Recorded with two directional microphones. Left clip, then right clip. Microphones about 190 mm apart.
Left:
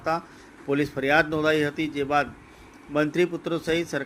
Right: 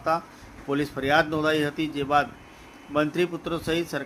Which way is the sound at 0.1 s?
10° left (ahead or behind).